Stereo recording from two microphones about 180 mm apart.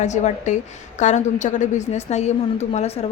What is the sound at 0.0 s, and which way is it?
A woman's voice, 40° left (ahead or behind).